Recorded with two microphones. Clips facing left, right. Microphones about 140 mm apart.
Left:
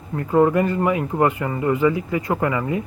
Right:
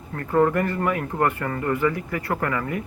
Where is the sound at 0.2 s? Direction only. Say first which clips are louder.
Left 3 dB; 15° left (ahead or behind).